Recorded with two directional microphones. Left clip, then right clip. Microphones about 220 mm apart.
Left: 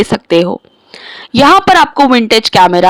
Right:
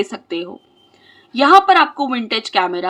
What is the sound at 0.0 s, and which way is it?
Speech, 45° left (ahead or behind).